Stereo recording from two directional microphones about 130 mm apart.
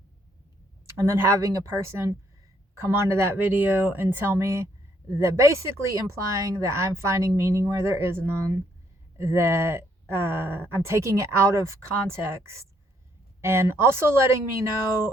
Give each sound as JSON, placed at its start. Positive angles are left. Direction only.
{"t": 0.9, "sound": "speech", "side_deg": -20}